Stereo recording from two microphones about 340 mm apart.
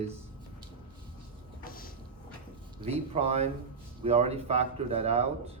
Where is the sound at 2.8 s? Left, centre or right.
Centre.